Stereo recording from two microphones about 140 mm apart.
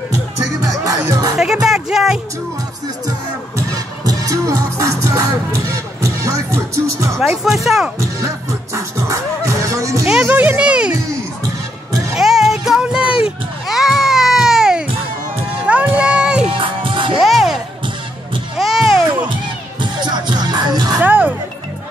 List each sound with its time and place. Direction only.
1.0 s music: 25° right (ahead or behind)
1.4 s speech: 5° right (ahead or behind)
3.1 s music: 25° right (ahead or behind)
7.2 s speech: centre (ahead or behind)
8.2 s music: 25° right (ahead or behind)
10.0 s music: 10° right (ahead or behind)
12.2 s music: centre (ahead or behind)
13.7 s cat: 5° right (ahead or behind)
15.6 s music: 10° right (ahead or behind)
16.5 s music: 35° right (ahead or behind)
17.2 s a sound: centre (ahead or behind)
18.6 s music: centre (ahead or behind)
19.8 s music: 30° right (ahead or behind)
21.0 s music: 10° right (ahead or behind)